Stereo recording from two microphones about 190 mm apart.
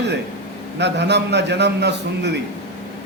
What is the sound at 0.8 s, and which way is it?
A man's voice, 65° right (ahead or behind).